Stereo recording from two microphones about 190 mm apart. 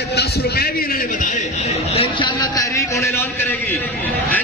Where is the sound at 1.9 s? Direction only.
25° left (ahead or behind).